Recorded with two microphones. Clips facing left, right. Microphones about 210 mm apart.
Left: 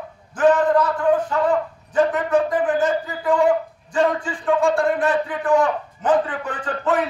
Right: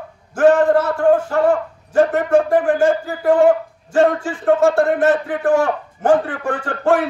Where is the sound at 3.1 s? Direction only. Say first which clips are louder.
Right 5 dB; 65° right (ahead or behind).